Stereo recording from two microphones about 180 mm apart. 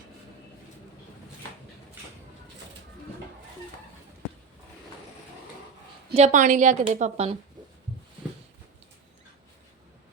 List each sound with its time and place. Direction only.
6.1 s a woman's voice: 40° right (ahead or behind)